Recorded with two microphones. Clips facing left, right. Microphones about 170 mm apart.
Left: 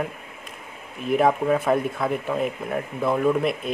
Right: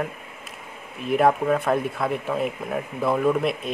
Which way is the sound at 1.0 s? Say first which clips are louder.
Even; centre (ahead or behind).